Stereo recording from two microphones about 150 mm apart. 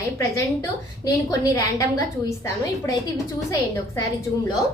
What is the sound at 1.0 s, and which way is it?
A woman's voice, 25° left (ahead or behind).